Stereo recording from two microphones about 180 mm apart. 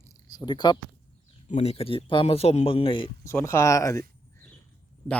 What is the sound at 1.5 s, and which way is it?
A man's voice, 35° left (ahead or behind).